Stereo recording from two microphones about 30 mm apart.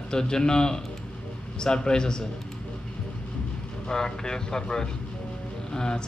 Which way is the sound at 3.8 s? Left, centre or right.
Left.